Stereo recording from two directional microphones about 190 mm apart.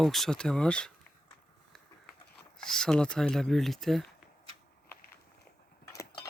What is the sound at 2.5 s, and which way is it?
Speech, 5° left (ahead or behind).